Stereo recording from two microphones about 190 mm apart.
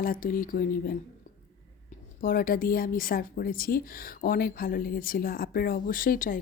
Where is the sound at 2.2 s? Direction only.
50° left (ahead or behind).